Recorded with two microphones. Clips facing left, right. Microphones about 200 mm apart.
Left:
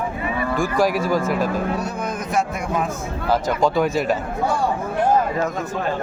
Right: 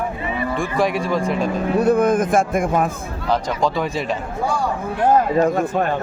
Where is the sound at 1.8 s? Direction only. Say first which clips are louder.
Right 11 dB; 55° right (ahead or behind).